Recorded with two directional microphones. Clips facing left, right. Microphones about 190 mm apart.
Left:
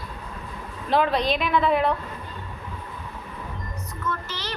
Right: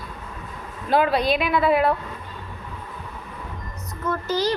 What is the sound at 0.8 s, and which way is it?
A woman's voice, 5° right (ahead or behind).